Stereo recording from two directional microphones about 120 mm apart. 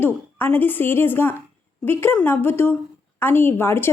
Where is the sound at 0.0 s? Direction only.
20° left (ahead or behind).